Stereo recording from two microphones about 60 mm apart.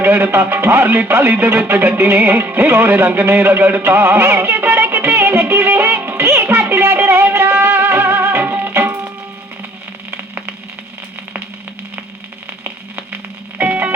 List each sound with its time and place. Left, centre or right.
0.0 s music: right
4.8 s music: right
13.6 s music: right